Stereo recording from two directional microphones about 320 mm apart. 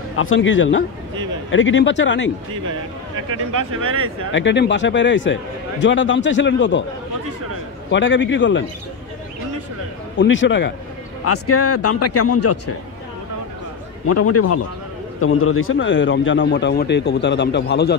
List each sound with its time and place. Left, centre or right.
0.1 s speech: left
3.5 s speech: right
4.3 s speech: left
7.9 s speech: left
10.1 s speech: left
11.2 s speech: left
14.0 s speech: left